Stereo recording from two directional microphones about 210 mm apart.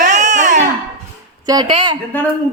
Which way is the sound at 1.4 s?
20° right (ahead or behind).